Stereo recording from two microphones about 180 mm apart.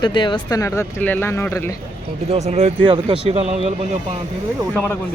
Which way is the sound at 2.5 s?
35° right (ahead or behind).